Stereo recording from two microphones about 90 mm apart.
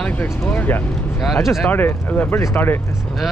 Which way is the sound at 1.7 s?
20° left (ahead or behind).